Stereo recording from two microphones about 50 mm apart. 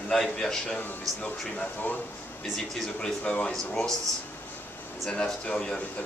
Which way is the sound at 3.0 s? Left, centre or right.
Left.